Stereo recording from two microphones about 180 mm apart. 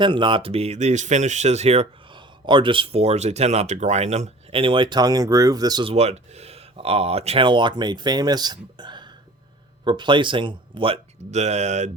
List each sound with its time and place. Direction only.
0.0 s speech: 25° right (ahead or behind)